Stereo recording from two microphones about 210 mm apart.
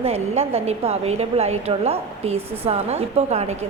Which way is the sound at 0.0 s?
30° right (ahead or behind).